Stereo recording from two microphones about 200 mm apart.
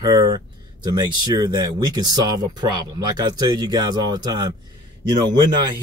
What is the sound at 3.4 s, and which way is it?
Speech, 20° right (ahead or behind).